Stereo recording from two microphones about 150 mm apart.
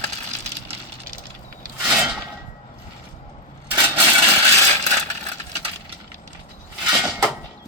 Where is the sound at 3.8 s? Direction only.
10° right (ahead or behind).